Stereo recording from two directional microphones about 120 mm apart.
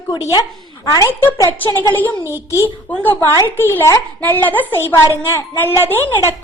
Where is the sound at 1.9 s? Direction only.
15° left (ahead or behind).